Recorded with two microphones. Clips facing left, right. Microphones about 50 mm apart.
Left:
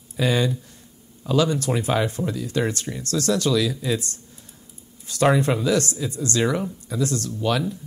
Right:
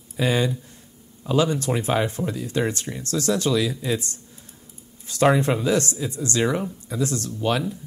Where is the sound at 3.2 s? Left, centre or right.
Right.